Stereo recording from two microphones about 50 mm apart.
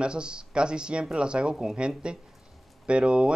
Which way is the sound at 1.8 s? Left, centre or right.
Centre.